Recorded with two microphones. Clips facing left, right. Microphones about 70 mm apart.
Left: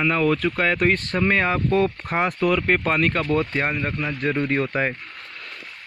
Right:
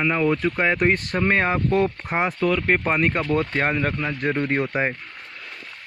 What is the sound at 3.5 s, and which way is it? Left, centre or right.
Speech, right.